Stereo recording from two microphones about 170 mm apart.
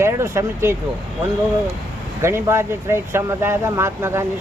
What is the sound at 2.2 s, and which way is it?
Speech, 15° right (ahead or behind).